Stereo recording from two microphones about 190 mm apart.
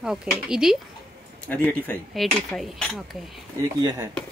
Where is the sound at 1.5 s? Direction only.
10° left (ahead or behind).